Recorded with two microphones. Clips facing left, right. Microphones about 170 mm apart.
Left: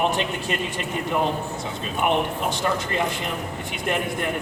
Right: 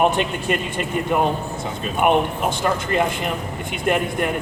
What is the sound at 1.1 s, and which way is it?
Speech, 55° right (ahead or behind).